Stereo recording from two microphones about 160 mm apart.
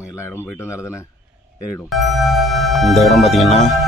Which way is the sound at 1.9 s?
Centre (ahead or behind).